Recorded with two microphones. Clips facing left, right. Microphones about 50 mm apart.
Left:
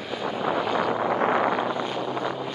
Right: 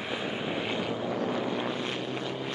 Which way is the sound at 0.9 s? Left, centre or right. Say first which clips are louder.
Left 8 dB; left.